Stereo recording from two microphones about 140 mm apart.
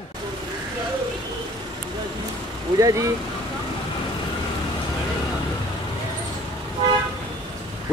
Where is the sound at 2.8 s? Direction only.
25° right (ahead or behind).